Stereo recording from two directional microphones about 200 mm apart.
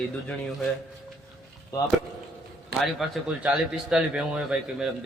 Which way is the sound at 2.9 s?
5° right (ahead or behind).